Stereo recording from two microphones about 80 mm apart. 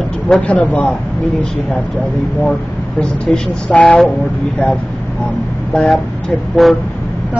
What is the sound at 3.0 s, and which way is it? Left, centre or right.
Speech, centre.